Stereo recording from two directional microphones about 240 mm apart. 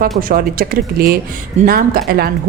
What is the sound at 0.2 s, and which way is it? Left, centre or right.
Speech, right.